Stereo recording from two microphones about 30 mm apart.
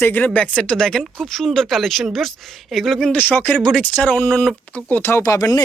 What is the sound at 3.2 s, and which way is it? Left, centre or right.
Speech, left.